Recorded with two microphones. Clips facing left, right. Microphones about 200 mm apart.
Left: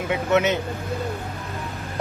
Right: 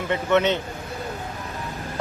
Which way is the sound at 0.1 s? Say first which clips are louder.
Even; 10° left (ahead or behind).